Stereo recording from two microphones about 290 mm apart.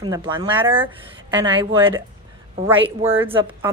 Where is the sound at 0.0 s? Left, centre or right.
Centre.